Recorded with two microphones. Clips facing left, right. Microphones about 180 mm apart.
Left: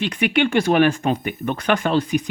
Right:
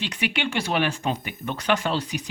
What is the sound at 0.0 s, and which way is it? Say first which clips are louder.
Speech: left 8 dB; 55° left (ahead or behind).